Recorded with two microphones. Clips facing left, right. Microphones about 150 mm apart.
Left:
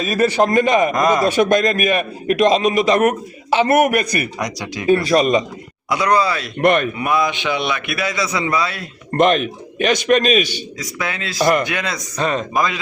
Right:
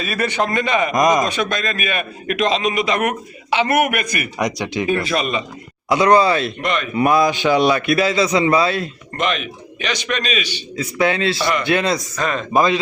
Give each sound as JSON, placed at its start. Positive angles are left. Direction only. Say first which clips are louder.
{"t": 0.0, "sound": "a man's voice", "louder": "left 5 dB", "side_deg": 35}
{"t": 0.9, "sound": "a man's voice", "louder": "even", "side_deg": -15}
{"t": 1.4, "sound": "a man's voice", "louder": "left 7 dB", "side_deg": 50}
{"t": 4.4, "sound": "speech", "louder": "right 4 dB", "side_deg": -20}
{"t": 4.9, "sound": "a man's voice", "louder": "left 8 dB", "side_deg": 35}
{"t": 5.9, "sound": "speech", "louder": "right 4 dB", "side_deg": -30}
{"t": 6.6, "sound": "a man's voice", "louder": "left 7 dB", "side_deg": 55}
{"t": 6.9, "sound": "a man's voice", "louder": "right 4 dB", "side_deg": -40}
{"t": 9.1, "sound": "a man's voice", "louder": "left 7 dB", "side_deg": 45}
{"t": 10.9, "sound": "a man's voice", "louder": "right 5 dB", "side_deg": -25}
{"t": 12.1, "sound": "a man's voice", "louder": "left 2 dB", "side_deg": 35}
{"t": 12.5, "sound": "speech", "louder": "right 8 dB", "side_deg": -25}